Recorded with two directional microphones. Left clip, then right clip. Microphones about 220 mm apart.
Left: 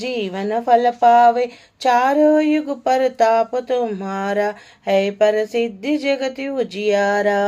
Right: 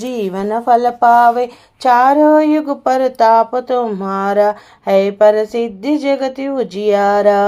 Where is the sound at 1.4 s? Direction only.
10° right (ahead or behind).